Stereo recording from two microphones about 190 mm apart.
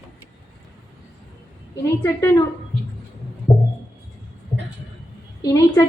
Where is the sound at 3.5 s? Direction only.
20° left (ahead or behind).